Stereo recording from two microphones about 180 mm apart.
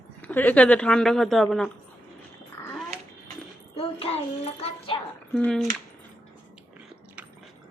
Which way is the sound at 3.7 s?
35° left (ahead or behind).